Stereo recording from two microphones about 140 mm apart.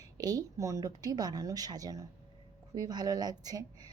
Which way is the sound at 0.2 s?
25° right (ahead or behind).